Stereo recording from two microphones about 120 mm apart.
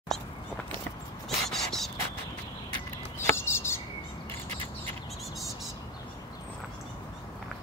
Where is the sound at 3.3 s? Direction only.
20° left (ahead or behind).